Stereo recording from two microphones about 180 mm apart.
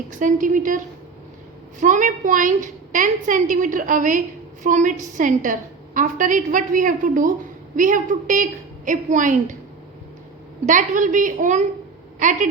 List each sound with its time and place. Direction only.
0.1 s a woman's voice: 45° right (ahead or behind)
1.8 s a woman's voice: 45° right (ahead or behind)
10.7 s a woman's voice: 45° right (ahead or behind)